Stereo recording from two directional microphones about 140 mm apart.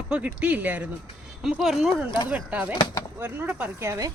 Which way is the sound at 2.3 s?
10° right (ahead or behind).